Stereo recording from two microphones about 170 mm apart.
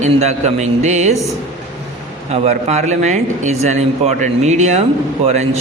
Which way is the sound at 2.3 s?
40° right (ahead or behind).